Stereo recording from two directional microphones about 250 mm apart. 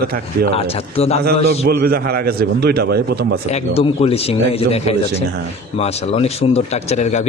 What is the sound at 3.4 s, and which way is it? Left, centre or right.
A man's voice, left.